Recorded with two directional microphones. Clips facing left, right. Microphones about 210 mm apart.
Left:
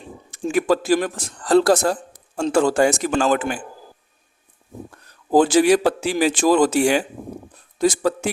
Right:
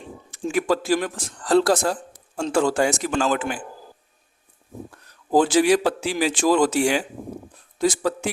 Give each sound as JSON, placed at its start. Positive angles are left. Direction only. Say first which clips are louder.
{"t": 0.5, "sound": "speech", "louder": "left 3 dB", "side_deg": 45}
{"t": 5.3, "sound": "speech", "louder": "left 3 dB", "side_deg": 45}